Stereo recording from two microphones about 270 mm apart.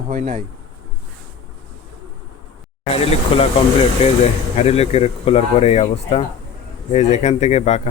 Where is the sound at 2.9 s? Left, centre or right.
Left.